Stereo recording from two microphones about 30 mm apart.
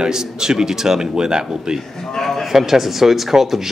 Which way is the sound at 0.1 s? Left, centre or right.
Right.